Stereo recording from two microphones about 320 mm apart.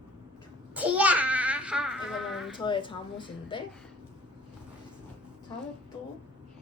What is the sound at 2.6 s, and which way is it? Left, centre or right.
A woman's voice, centre.